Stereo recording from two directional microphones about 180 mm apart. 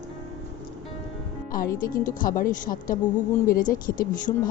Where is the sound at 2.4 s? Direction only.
50° left (ahead or behind).